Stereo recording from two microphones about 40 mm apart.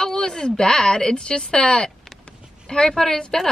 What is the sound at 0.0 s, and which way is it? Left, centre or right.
A woman's voice, centre.